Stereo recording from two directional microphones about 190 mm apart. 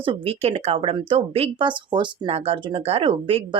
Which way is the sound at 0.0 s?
30° right (ahead or behind).